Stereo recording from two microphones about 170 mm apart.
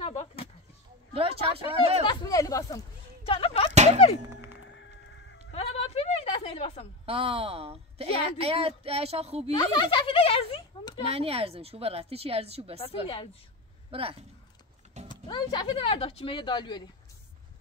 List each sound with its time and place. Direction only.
0.0 s a sound: 40° left (ahead or behind)
1.1 s speech: 35° right (ahead or behind)
2.0 s speech: 20° left (ahead or behind)
3.3 s whip: 35° left (ahead or behind)
3.7 s a sound: 40° right (ahead or behind)
4.2 s music: 15° right (ahead or behind)
5.5 s a sound: 35° left (ahead or behind)
7.1 s a woman's voice: 35° right (ahead or behind)
9.5 s speech: 25° left (ahead or behind)
11.1 s a woman's voice: 35° right (ahead or behind)
12.8 s speech: 35° left (ahead or behind)
13.8 s speech: 35° right (ahead or behind)
15.0 s speech: 25° left (ahead or behind)